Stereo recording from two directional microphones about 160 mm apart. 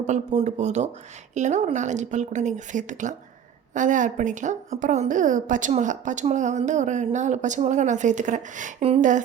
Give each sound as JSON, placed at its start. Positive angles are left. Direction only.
{"t": 0.0, "sound": "a woman's voice", "side_deg": -50}